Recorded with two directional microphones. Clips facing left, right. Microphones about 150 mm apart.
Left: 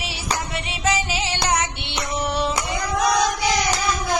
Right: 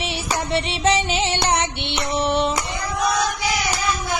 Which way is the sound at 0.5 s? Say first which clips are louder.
Right 6 dB; 30° right (ahead or behind).